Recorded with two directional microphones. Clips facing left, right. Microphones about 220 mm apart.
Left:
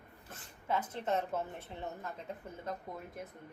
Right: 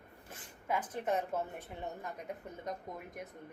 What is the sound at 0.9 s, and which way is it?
A woman's voice, 10° right (ahead or behind).